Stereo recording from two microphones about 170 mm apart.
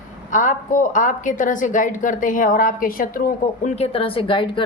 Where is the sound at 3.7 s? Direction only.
35° left (ahead or behind).